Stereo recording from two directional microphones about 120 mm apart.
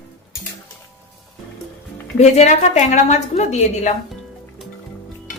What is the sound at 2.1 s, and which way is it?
A woman's voice, 65° left (ahead or behind).